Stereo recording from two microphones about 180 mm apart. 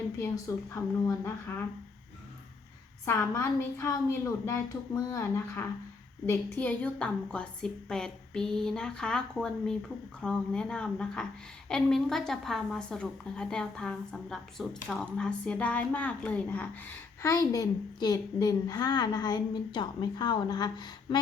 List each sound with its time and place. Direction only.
0.2 s a woman's voice: 15° left (ahead or behind)
3.1 s a woman's voice: 15° left (ahead or behind)
17.3 s a woman's voice: 20° left (ahead or behind)